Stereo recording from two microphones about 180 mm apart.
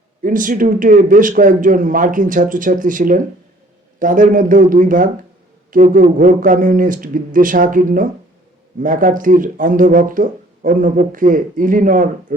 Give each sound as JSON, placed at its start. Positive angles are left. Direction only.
{"t": 0.2, "sound": "speech", "side_deg": -50}